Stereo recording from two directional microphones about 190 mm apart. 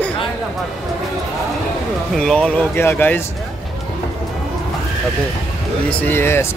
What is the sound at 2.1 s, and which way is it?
Speech, 5° left (ahead or behind).